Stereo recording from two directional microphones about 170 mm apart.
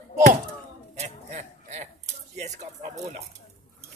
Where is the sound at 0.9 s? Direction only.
40° right (ahead or behind).